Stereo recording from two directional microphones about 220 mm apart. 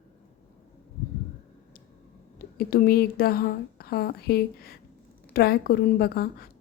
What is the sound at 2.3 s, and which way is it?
A woman's voice, 40° left (ahead or behind).